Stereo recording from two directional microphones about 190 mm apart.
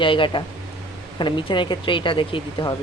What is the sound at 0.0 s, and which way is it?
Speech, 25° left (ahead or behind).